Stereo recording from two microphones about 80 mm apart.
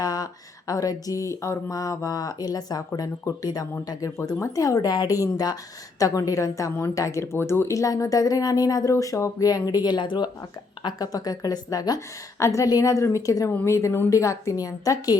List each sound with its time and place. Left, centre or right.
0.0 s a sound: left
0.7 s speech: left
4.4 s speech: left
10.8 s speech: left
11.9 s a woman's voice: left